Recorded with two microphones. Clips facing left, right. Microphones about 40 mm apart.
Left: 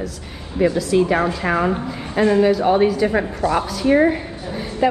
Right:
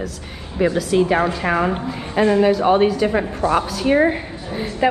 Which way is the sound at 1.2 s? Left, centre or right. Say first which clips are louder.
Right 1 dB; right.